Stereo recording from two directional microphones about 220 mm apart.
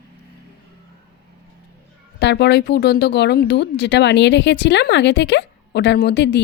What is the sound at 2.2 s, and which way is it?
Speech, 50° left (ahead or behind).